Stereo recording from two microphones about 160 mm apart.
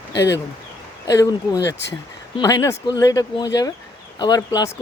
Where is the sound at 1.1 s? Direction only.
20° left (ahead or behind).